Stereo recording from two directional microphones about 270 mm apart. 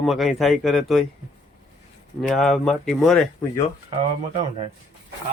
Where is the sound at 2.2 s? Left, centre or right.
Centre.